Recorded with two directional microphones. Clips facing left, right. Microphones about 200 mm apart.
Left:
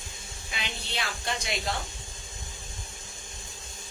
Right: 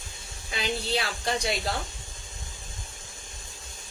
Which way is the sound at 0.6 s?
35° right (ahead or behind).